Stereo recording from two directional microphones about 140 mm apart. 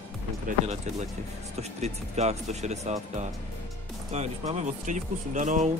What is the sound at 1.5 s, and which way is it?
Speech, 50° right (ahead or behind).